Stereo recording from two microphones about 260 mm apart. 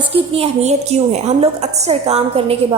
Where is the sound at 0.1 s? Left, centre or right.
Right.